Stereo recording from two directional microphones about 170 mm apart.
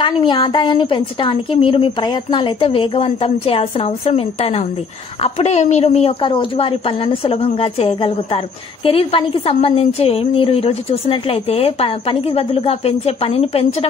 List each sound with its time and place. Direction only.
0.0 s a woman's voice: 30° left (ahead or behind)